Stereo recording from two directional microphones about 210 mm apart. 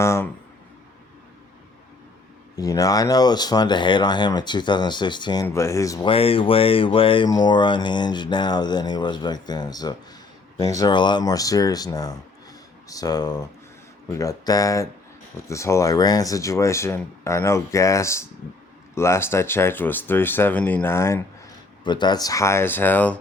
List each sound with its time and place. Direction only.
0.0 s speech: 15° left (ahead or behind)
2.6 s speech: 15° left (ahead or behind)